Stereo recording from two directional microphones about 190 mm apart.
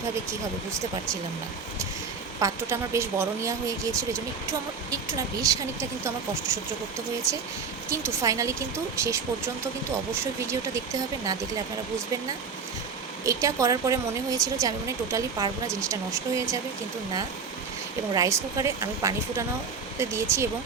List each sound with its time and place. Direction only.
2.4 s a woman's voice: 15° right (ahead or behind)
7.9 s a woman's voice: 15° right (ahead or behind)
13.2 s a woman's voice: 15° right (ahead or behind)
18.1 s a woman's voice: 15° right (ahead or behind)